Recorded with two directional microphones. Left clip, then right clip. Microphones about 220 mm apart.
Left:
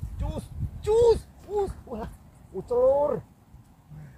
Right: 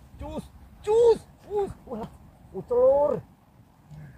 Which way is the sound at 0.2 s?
25° left (ahead or behind).